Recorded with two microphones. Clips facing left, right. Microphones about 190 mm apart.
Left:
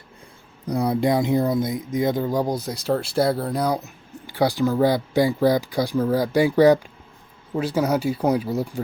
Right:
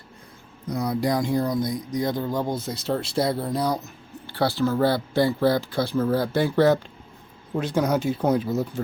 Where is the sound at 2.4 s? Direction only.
35° left (ahead or behind).